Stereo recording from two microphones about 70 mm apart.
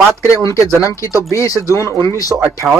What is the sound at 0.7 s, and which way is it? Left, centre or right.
Speech, left.